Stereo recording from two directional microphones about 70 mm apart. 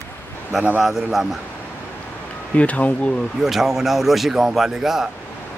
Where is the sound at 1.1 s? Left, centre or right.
Centre.